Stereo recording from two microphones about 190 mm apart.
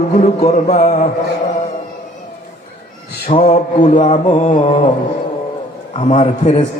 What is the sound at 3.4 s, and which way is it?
A man's voice, 40° left (ahead or behind).